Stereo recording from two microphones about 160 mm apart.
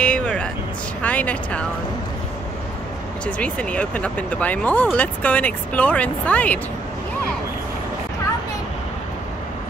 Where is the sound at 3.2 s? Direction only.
10° left (ahead or behind).